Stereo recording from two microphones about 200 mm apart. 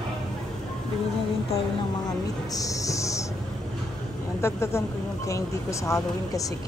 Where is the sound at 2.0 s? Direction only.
15° left (ahead or behind).